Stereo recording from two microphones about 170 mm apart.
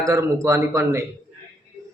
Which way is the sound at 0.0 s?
15° right (ahead or behind).